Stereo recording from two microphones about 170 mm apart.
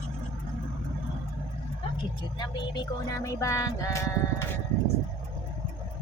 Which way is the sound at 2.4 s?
20° left (ahead or behind).